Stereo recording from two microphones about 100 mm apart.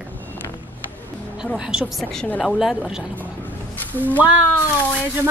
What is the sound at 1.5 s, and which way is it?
Speech, 10° right (ahead or behind).